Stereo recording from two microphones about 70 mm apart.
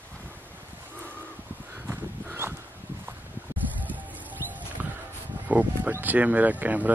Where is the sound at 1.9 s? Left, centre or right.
Right.